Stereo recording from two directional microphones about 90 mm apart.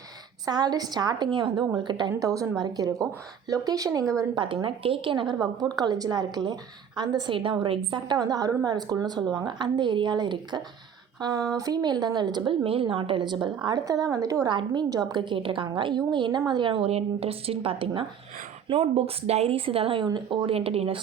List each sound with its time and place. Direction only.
0.4 s a woman's voice: 50° right (ahead or behind)
2.1 s a woman's voice: 40° right (ahead or behind)
4.4 s a woman's voice: 70° right (ahead or behind); by 12.4 s 50° right (ahead or behind)
12.5 s a woman's voice: 85° right; by 14.5 s 40° right (ahead or behind)
14.5 s a woman's voice: 55° right (ahead or behind)
15.2 s a woman's voice: 75° right (ahead or behind); by 20.1 s 90° right
20.1 s speech: 55° right (ahead or behind); by 21.0 s 90° right